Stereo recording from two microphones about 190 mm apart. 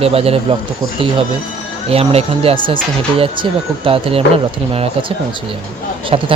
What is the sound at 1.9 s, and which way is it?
Speech, 30° right (ahead or behind).